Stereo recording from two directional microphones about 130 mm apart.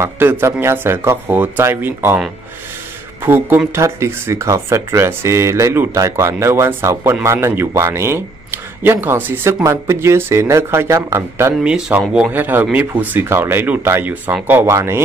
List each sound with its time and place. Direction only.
0.0 s speech: 20° right (ahead or behind)
3.3 s speech: 15° right (ahead or behind)
11.5 s speech: 5° right (ahead or behind)